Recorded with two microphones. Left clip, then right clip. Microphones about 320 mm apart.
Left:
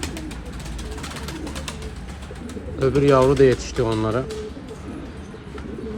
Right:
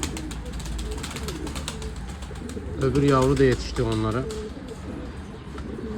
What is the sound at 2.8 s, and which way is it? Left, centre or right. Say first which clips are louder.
A man's voice: left 5 dB; left.